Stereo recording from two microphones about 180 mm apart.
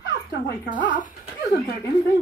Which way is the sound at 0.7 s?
45° left (ahead or behind).